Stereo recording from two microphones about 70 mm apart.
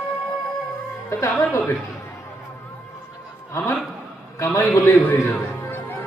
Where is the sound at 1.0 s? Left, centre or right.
Left.